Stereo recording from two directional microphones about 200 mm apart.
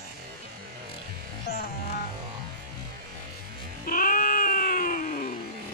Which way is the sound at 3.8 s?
45° left (ahead or behind).